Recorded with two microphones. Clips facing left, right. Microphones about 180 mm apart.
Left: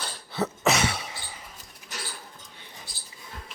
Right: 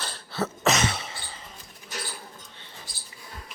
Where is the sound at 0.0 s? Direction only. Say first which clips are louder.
Even; 10° left (ahead or behind).